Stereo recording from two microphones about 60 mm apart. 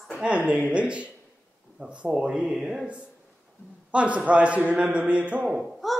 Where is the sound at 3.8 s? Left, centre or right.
Right.